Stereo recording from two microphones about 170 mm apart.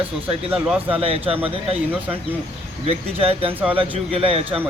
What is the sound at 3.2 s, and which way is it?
Speech, 35° right (ahead or behind).